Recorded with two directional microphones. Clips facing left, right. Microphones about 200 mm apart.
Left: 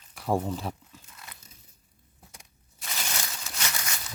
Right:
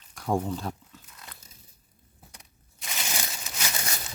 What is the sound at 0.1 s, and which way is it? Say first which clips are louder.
Speech: even; 5° left (ahead or behind).